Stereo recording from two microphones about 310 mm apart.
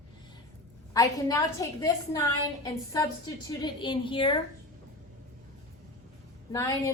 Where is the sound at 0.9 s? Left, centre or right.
Centre.